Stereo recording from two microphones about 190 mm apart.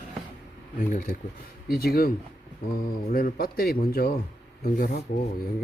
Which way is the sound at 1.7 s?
50° left (ahead or behind).